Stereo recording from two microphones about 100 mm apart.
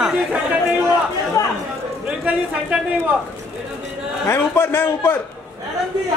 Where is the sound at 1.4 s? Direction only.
35° left (ahead or behind).